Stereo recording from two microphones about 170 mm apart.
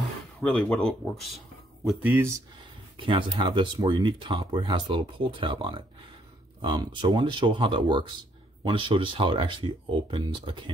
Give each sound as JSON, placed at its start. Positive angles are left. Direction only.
{"t": 0.4, "sound": "speech", "side_deg": 5}
{"t": 1.9, "sound": "speech", "side_deg": -10}
{"t": 3.0, "sound": "speech", "side_deg": -30}